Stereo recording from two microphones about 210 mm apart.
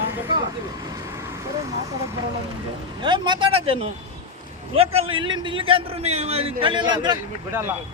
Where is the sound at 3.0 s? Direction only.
20° right (ahead or behind).